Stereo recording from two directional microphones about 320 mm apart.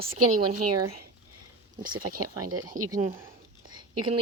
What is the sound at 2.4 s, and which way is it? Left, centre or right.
Speech, right.